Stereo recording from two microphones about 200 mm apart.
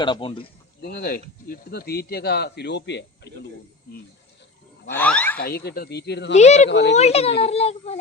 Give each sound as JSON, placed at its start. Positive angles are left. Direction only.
{"t": 0.0, "sound": "a man's voice", "side_deg": 25}
{"t": 0.8, "sound": "speech", "side_deg": 50}
{"t": 3.9, "sound": "a sound", "side_deg": 50}
{"t": 4.9, "sound": "a sound", "side_deg": 10}
{"t": 5.4, "sound": "speech", "side_deg": 50}
{"t": 6.3, "sound": "a child's voice", "side_deg": 35}
{"t": 6.7, "sound": "a child's voice", "side_deg": 60}
{"t": 6.9, "sound": "a child's voice", "side_deg": 30}